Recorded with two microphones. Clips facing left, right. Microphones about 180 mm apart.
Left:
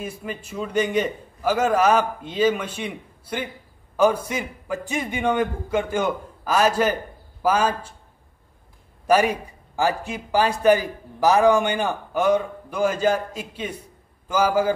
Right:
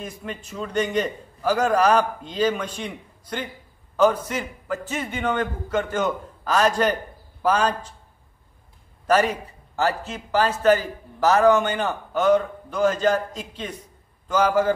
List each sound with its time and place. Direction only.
0.0 s a man's voice: 10° left (ahead or behind)
9.0 s a man's voice: 10° left (ahead or behind)